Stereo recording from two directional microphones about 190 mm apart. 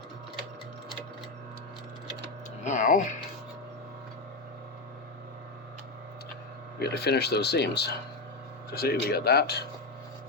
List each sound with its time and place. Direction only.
2.6 s speech: 40° left (ahead or behind)
6.7 s speech: 60° left (ahead or behind)